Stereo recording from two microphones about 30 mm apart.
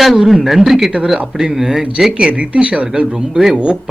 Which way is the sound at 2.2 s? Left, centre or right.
Right.